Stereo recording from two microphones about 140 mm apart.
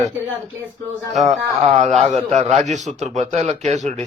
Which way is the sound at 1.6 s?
55° right (ahead or behind).